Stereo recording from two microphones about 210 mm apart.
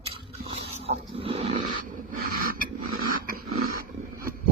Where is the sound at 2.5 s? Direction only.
40° right (ahead or behind).